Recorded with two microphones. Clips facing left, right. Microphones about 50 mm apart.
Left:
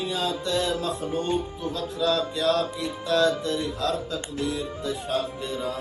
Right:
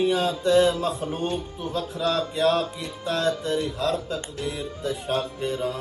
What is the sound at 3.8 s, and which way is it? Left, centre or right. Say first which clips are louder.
Music: right 1 dB; right.